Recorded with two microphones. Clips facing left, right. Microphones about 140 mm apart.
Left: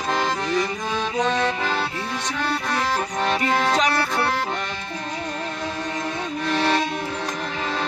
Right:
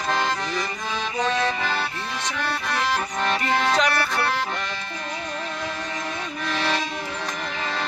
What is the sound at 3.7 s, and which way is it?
Music, 20° left (ahead or behind).